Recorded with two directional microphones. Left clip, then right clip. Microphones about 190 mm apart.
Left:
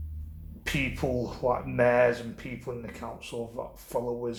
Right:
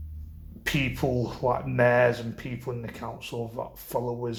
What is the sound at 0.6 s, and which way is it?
Speech, 35° right (ahead or behind).